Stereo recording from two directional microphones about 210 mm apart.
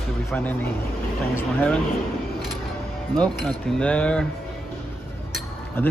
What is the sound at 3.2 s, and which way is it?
Speech, 5° left (ahead or behind).